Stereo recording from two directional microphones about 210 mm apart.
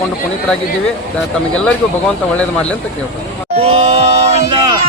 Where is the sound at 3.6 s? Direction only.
30° right (ahead or behind).